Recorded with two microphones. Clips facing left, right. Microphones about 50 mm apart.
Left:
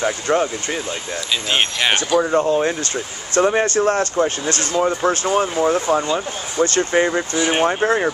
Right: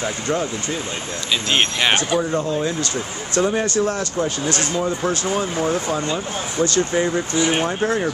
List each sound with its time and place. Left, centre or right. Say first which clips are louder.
0.0 s speech: left 4 dB; left
1.5 s speech: even; centre
2.2 s speech: left 4 dB; left